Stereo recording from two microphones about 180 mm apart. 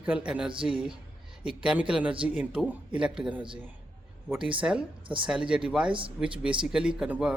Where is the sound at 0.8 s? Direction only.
5° right (ahead or behind).